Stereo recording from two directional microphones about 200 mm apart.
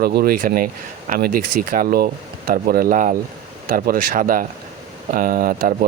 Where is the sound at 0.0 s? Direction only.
50° right (ahead or behind).